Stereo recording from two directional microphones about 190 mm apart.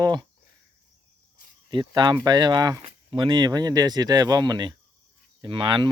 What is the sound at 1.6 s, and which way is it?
Speech, 25° right (ahead or behind).